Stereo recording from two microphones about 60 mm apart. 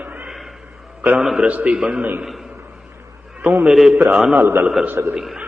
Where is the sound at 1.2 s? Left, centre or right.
Centre.